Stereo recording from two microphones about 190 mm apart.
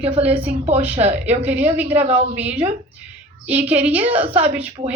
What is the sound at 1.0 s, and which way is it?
Speech, 35° right (ahead or behind).